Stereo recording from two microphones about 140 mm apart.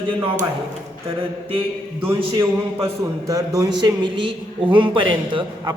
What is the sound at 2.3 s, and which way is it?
A man's voice, 20° right (ahead or behind).